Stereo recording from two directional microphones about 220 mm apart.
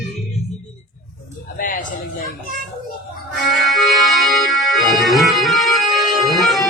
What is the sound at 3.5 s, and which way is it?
Music, centre (ahead or behind).